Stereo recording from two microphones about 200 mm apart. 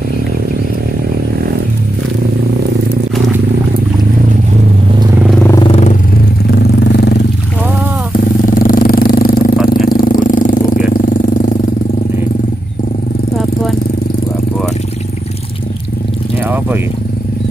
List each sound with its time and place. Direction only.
5.5 s vehicle: 25° left (ahead or behind)
8.5 s vehicle: 45° left (ahead or behind)
9.7 s jackhammer: 45° left (ahead or behind)